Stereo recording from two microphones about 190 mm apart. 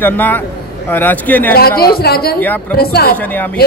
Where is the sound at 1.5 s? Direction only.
55° left (ahead or behind).